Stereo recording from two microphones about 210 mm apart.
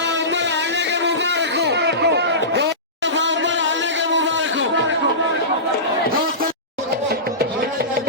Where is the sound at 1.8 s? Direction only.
55° right (ahead or behind).